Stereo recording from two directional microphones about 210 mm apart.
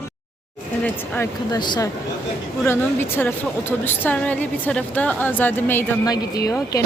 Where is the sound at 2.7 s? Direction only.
10° left (ahead or behind).